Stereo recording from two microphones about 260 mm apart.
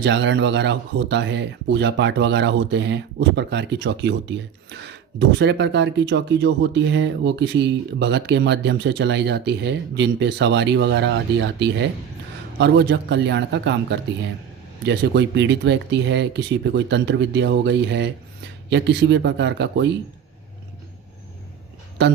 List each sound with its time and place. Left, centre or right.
0.0 s a man's voice: right